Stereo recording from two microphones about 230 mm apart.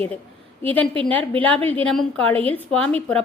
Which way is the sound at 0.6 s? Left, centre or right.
Centre.